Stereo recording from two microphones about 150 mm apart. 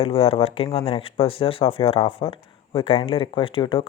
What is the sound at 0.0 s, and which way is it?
Speech, 40° left (ahead or behind).